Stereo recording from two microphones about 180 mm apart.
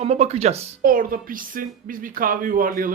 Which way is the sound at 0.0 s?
35° right (ahead or behind).